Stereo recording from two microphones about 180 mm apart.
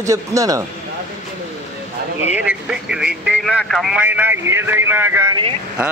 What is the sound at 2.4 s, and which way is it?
A man's voice, 5° right (ahead or behind).